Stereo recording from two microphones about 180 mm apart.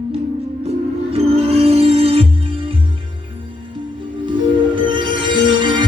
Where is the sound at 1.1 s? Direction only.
35° right (ahead or behind).